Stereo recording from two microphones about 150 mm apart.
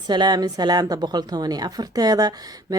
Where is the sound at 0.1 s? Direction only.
30° right (ahead or behind).